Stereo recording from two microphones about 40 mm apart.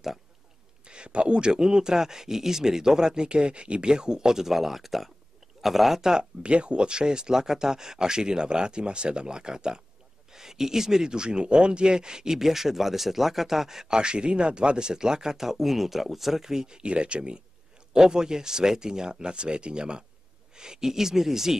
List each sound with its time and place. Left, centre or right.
0.8 s speech: right
6.4 s speech: right
12.4 s speech: centre